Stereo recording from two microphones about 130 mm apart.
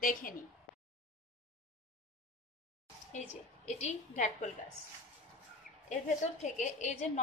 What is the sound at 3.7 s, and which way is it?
Speech, 65° left (ahead or behind).